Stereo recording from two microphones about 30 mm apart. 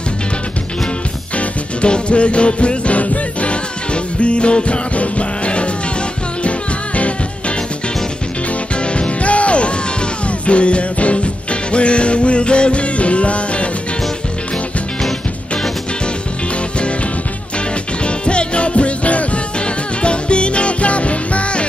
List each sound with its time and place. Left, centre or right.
1.3 s music: left
7.0 s music: left
8.8 s music: left
18.0 s music: left